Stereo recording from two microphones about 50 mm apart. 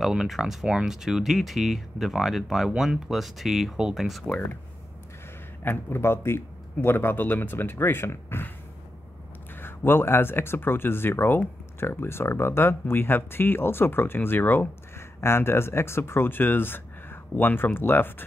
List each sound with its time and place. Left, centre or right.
0.0 s speech: centre
5.6 s speech: left
9.6 s speech: left
15.0 s speech: left